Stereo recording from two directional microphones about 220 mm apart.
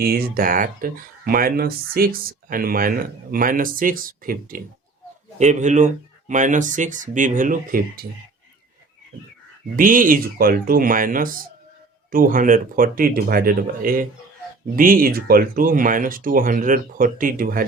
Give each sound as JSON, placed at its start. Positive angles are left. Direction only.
{"t": 0.0, "sound": "speech", "side_deg": -45}
{"t": 9.7, "sound": "speech", "side_deg": -40}